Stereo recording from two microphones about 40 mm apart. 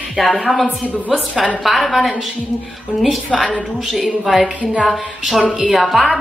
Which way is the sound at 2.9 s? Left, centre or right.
Right.